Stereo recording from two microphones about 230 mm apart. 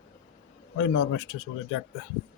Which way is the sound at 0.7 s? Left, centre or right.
Left.